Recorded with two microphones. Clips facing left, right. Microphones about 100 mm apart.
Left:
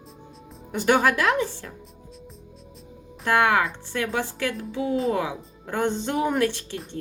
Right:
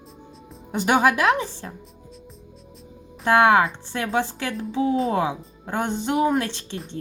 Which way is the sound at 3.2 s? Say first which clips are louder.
Right 4 dB; 25° right (ahead or behind).